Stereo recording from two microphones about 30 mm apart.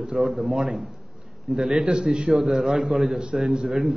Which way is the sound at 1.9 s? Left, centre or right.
Right.